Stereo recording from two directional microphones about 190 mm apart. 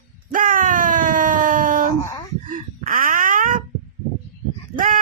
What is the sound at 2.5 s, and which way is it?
Wail, 45° right (ahead or behind).